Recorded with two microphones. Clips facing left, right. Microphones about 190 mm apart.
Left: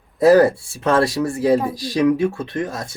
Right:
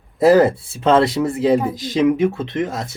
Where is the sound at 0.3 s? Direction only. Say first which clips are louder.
Even; 20° right (ahead or behind).